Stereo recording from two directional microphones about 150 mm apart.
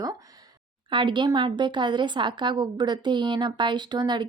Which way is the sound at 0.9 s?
35° right (ahead or behind).